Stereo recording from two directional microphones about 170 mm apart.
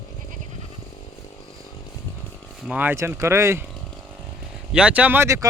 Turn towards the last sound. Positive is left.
turn(degrees=-15)  # may be behind; listen again after turning